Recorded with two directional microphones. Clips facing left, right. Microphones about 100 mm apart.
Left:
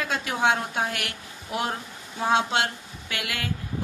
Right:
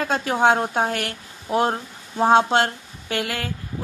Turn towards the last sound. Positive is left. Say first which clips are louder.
# right 6 dB
turn(degrees=-40)  # may be behind; listen again after turning